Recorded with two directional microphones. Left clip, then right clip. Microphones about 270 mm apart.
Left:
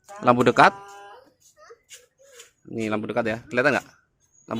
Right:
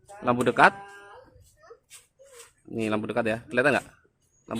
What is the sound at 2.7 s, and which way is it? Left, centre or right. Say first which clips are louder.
Speech: left 1 dB; centre.